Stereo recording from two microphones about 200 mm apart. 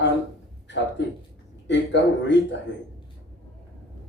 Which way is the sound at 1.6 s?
65° left (ahead or behind).